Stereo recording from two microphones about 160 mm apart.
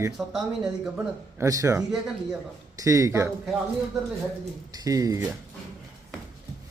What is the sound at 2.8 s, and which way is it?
Speech, 20° right (ahead or behind).